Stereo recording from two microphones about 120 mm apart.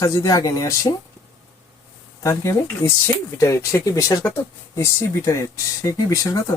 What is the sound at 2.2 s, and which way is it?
Speech, 25° left (ahead or behind).